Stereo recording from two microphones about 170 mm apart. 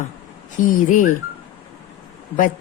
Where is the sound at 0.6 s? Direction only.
50° left (ahead or behind).